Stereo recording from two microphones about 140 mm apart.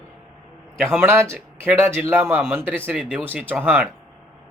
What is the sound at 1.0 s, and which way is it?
Speech, 15° right (ahead or behind).